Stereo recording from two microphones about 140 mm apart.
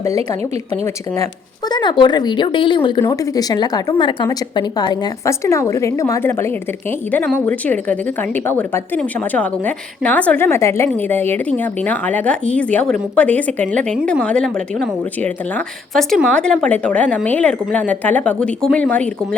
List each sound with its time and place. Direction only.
1.7 s a woman's voice: 35° left (ahead or behind); by 19.4 s 10° left (ahead or behind)